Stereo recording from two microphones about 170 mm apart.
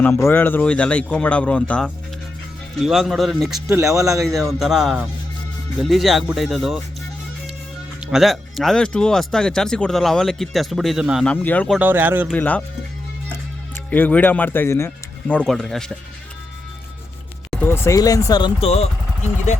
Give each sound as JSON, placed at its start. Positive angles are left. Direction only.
{"t": 0.0, "sound": "speech", "side_deg": 15}
{"t": 3.7, "sound": "speech", "side_deg": -15}
{"t": 4.2, "sound": "speech", "side_deg": 0}
{"t": 8.1, "sound": "speech", "side_deg": 0}
{"t": 11.3, "sound": "speech", "side_deg": 10}
{"t": 11.8, "sound": "speech", "side_deg": -10}
{"t": 12.3, "sound": "speech", "side_deg": 10}
{"t": 13.9, "sound": "speech", "side_deg": 10}
{"t": 17.5, "sound": "speech", "side_deg": 10}